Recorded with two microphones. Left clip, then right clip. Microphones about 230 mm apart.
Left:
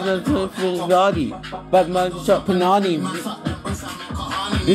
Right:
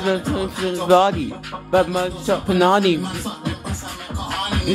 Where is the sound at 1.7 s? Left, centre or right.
Centre.